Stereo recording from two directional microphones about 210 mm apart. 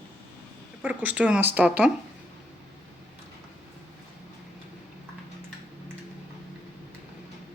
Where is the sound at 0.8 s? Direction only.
5° right (ahead or behind).